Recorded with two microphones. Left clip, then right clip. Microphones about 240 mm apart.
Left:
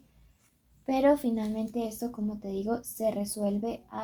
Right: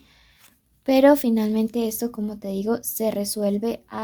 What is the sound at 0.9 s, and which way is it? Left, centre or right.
A woman's voice, right.